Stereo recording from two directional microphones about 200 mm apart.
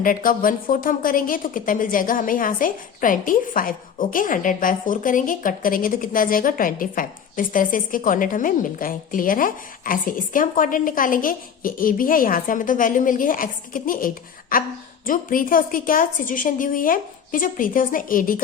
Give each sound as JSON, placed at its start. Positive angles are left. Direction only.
{"t": 0.0, "sound": "a woman's voice", "side_deg": 45}